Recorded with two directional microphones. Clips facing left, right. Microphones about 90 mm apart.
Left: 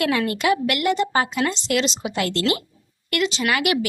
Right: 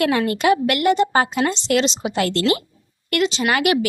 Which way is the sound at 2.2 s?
40° right (ahead or behind).